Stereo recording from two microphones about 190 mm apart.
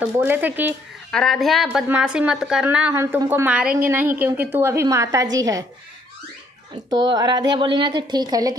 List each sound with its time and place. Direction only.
0.0 s a woman's voice: 10° right (ahead or behind)
1.1 s a woman's voice: centre (ahead or behind); by 5.7 s 20° right (ahead or behind)
6.7 s a woman's voice: 25° right (ahead or behind)